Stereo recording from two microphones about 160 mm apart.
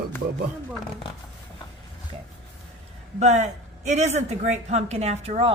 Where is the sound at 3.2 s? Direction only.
45° right (ahead or behind).